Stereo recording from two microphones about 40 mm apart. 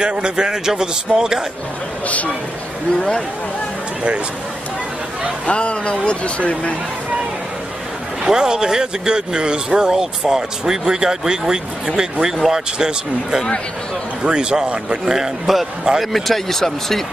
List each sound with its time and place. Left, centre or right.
0.0 s speech: right
2.0 s speech: left
3.0 s a man's voice: centre
5.5 s a man's voice: left
8.2 s a man's voice: centre
16.0 s speech: centre